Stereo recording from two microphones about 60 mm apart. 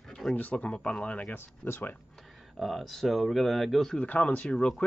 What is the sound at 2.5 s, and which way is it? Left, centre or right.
Speech, centre.